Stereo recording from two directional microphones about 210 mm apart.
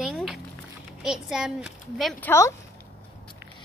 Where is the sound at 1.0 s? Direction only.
5° right (ahead or behind).